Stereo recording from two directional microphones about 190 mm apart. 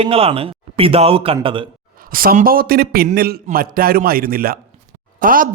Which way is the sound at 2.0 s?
50° right (ahead or behind).